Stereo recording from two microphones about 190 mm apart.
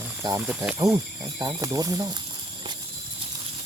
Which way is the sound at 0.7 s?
15° right (ahead or behind).